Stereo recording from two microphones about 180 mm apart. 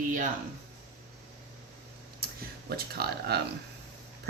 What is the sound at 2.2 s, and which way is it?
Speech, 60° right (ahead or behind).